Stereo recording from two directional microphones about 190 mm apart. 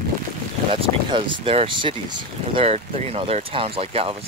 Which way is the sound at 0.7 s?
30° right (ahead or behind).